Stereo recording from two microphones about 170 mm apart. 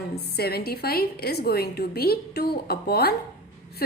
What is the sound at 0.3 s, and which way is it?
A woman's voice, 65° left (ahead or behind).